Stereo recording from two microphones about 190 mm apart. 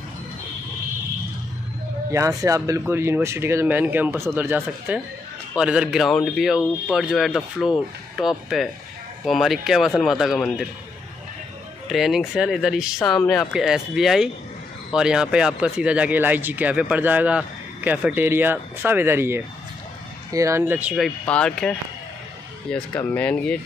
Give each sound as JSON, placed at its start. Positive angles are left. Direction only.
{"t": 2.0, "sound": "speech", "side_deg": -15}
{"t": 11.9, "sound": "speech", "side_deg": 0}
{"t": 22.9, "sound": "speech", "side_deg": 5}